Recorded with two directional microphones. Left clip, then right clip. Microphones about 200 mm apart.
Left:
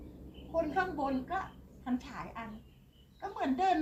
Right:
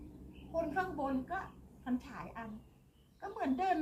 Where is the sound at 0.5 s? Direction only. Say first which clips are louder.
Left 4 dB; 5° right (ahead or behind).